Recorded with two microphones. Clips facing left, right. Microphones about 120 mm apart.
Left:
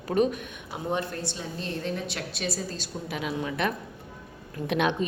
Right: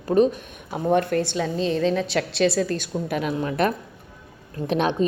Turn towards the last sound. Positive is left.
turn(degrees=-35)  # may be behind; listen again after turning